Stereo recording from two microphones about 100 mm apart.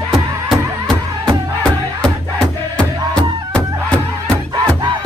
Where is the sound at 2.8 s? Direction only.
10° left (ahead or behind).